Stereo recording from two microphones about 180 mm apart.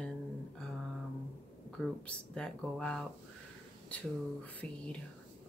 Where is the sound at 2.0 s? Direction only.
5° left (ahead or behind).